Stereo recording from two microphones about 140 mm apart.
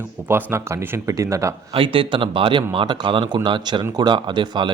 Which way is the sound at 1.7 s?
40° right (ahead or behind).